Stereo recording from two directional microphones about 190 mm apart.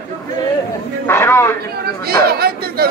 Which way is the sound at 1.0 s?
15° left (ahead or behind).